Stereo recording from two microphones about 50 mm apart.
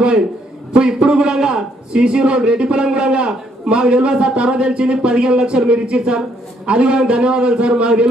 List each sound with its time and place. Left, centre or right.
0.7 s a man's voice: centre